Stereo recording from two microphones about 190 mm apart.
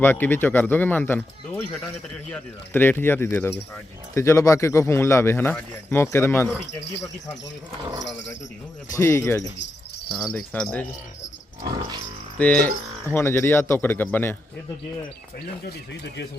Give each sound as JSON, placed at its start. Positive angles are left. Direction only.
{"t": 0.0, "sound": "speech", "side_deg": 10}
{"t": 8.9, "sound": "speech", "side_deg": 15}
{"t": 11.6, "sound": "dog", "side_deg": -20}
{"t": 12.4, "sound": "speech", "side_deg": 5}
{"t": 15.6, "sound": "speech", "side_deg": 65}